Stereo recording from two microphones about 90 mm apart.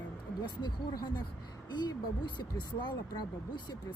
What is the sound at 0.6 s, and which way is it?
Speech, 55° left (ahead or behind).